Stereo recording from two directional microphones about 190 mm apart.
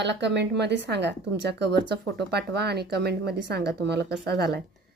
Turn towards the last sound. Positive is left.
turn(degrees=-55)  # may be behind; listen again after turning